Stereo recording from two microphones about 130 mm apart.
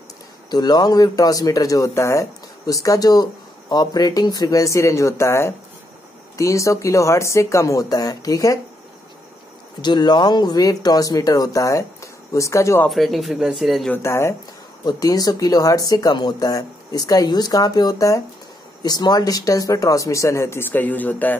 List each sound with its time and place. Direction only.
0.5 s speech: 30° left (ahead or behind)
9.8 s speech: 35° left (ahead or behind)
12.8 s speech: centre (ahead or behind)
14.0 s speech: 20° left (ahead or behind)